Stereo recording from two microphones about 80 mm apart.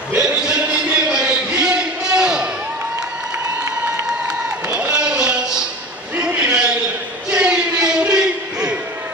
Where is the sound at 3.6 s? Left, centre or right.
Right.